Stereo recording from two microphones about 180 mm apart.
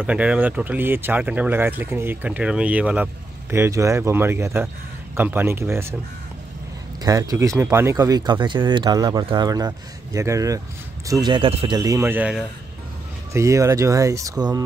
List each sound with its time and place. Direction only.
0.0 s speech: 5° right (ahead or behind)
7.0 s speech: 20° right (ahead or behind)
13.3 s speech: 15° right (ahead or behind)